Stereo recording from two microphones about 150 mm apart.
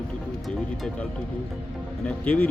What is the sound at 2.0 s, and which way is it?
Speech, 10° left (ahead or behind).